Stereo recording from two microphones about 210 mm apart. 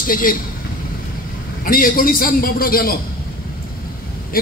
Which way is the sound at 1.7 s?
40° left (ahead or behind).